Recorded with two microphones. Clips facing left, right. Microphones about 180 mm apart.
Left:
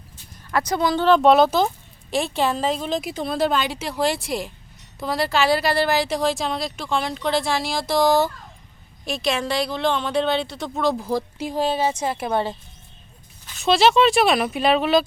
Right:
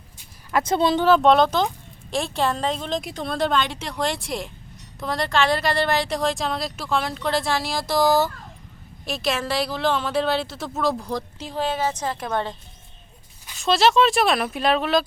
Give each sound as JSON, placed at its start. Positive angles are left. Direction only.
{"t": 0.5, "sound": "speech", "side_deg": -25}
{"t": 1.0, "sound": "speech", "side_deg": 0}
{"t": 13.6, "sound": "speech", "side_deg": 0}